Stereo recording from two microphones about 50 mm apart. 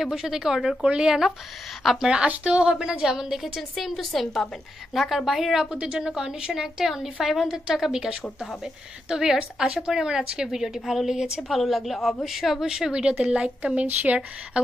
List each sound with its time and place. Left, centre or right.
0.0 s a woman's voice: centre
5.7 s a woman's voice: centre
11.4 s a woman's voice: centre
13.2 s speech: right